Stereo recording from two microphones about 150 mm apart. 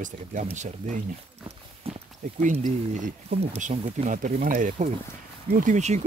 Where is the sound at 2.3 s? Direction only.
55° right (ahead or behind); by 4.7 s 75° right (ahead or behind).